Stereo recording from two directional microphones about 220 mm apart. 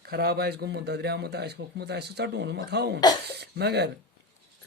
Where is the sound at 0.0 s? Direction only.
45° right (ahead or behind).